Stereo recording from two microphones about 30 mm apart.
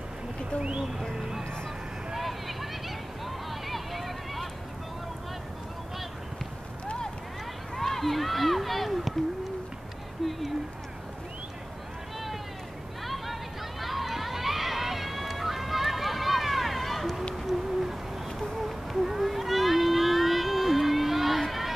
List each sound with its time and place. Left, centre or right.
0.6 s speech: right
2.1 s a sound: centre
3.3 s vehicle: centre
7.7 s speech: centre
13.0 s run: centre
17.5 s owl: centre
18.6 s a sound: centre
21.4 s run: centre